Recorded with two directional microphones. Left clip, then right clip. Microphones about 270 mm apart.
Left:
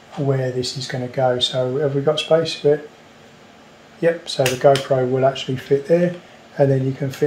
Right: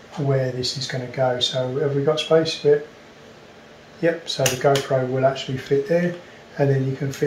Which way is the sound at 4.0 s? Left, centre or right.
Left.